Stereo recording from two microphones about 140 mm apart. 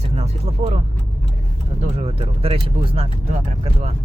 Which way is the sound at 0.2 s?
50° right (ahead or behind).